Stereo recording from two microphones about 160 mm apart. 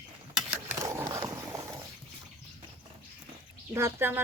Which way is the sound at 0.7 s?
20° right (ahead or behind).